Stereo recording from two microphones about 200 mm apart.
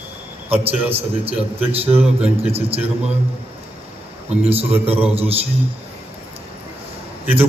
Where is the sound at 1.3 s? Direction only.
30° right (ahead or behind).